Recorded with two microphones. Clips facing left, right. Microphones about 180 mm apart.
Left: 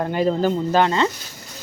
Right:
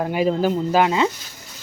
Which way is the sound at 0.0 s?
10° right (ahead or behind).